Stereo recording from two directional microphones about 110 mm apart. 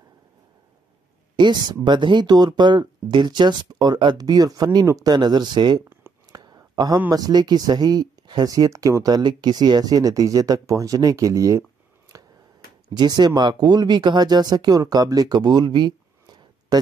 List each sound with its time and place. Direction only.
1.3 s speech: 45° right (ahead or behind)
6.3 s a sound: 35° right (ahead or behind)
7.1 s speech: 35° right (ahead or behind)
12.9 s speech: 45° right (ahead or behind)